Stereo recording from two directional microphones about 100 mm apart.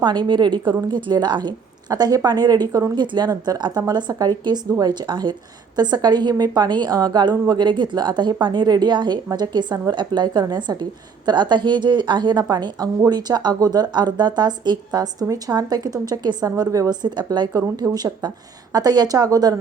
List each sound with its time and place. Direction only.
0.0 s speech: 50° right (ahead or behind)